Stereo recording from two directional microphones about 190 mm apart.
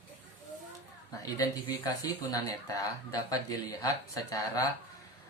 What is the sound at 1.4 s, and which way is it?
Speech, 20° left (ahead or behind).